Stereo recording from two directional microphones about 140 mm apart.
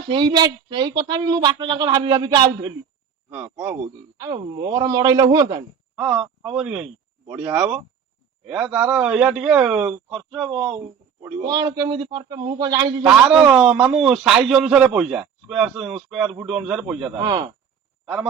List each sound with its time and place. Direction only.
0.1 s a woman's voice: 35° right (ahead or behind)
3.2 s a man's voice: 15° right (ahead or behind)
4.2 s a man's voice: 30° right (ahead or behind)
6.0 s a man's voice: 10° right (ahead or behind)
11.2 s a man's voice: 15° right (ahead or behind)
11.4 s a man's voice: 30° right (ahead or behind)
13.3 s a man's voice: 5° right (ahead or behind)
17.2 s a woman's voice: 35° right (ahead or behind)
18.0 s a man's voice: 5° right (ahead or behind)